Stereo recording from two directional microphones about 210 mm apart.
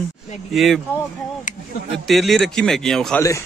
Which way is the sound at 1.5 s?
35° left (ahead or behind).